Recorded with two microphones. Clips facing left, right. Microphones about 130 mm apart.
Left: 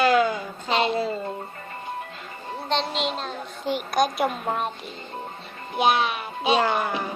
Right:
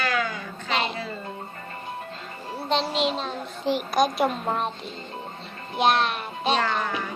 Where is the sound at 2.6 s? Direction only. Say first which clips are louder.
Right 2 dB; 5° right (ahead or behind).